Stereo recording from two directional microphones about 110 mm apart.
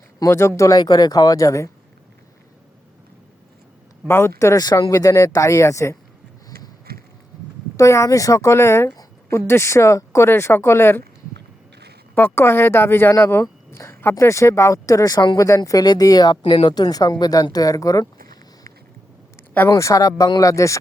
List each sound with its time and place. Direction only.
0.2 s speech: 25° left (ahead or behind)
4.0 s speech: 20° left (ahead or behind)
7.8 s speech: 30° left (ahead or behind)
12.1 s speech: 20° left (ahead or behind); by 16.4 s 40° left (ahead or behind)
16.4 s speech: 55° left (ahead or behind); by 18.1 s 30° left (ahead or behind)
19.7 s speech: 30° left (ahead or behind)